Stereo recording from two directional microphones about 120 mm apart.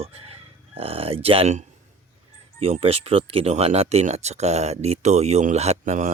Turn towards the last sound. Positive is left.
turn(degrees=-85)